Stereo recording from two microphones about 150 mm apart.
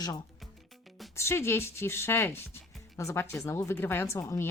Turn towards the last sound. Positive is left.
turn(degrees=20)  # may be behind; listen again after turning